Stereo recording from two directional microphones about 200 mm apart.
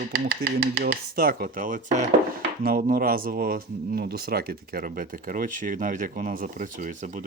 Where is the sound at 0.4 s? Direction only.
50° right (ahead or behind).